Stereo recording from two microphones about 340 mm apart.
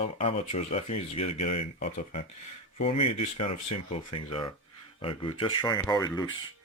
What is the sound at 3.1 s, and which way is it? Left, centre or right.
Speech, left.